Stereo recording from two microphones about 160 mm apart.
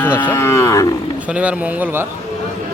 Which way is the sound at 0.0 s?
10° left (ahead or behind).